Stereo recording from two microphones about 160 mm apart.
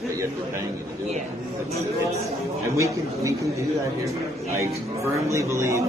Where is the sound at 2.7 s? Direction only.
20° right (ahead or behind).